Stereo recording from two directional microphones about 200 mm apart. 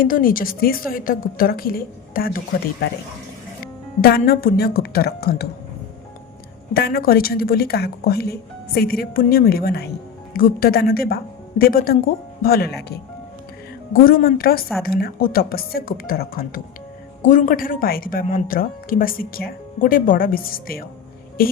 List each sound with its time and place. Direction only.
0.0 s speech: 45° left (ahead or behind)
4.0 s speech: 50° left (ahead or behind)
6.7 s speech: 50° left (ahead or behind)
13.9 s speech: 45° left (ahead or behind)